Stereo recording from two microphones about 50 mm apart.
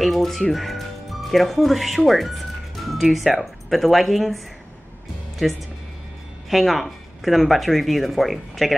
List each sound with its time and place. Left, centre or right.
0.0 s speech: centre
6.5 s speech: centre